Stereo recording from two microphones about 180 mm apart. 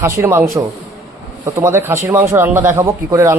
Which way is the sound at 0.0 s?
15° right (ahead or behind).